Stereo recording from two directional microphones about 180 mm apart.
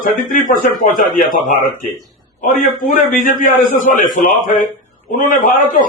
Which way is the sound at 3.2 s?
50° left (ahead or behind).